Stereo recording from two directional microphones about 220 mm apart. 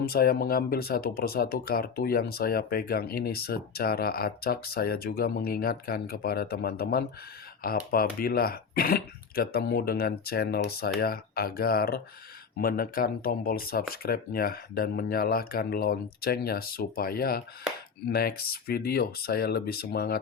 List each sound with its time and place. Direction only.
0.0 s speech: 45° left (ahead or behind)